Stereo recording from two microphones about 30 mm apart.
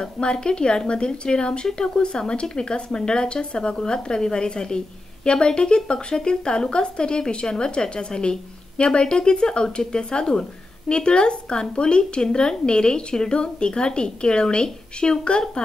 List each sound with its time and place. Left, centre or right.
0.0 s speech: left